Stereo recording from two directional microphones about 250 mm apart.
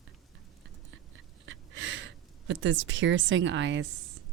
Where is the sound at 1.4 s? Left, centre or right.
Right.